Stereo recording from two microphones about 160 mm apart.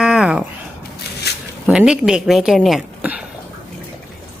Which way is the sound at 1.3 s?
90° left.